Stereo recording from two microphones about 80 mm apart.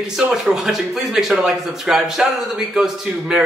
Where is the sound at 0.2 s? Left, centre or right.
Centre.